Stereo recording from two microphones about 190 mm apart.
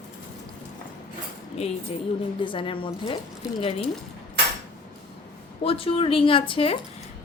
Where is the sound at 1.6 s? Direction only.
35° left (ahead or behind).